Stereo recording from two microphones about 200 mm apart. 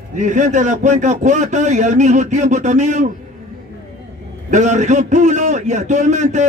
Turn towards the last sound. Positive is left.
turn(degrees=-35)  # may be behind; listen again after turning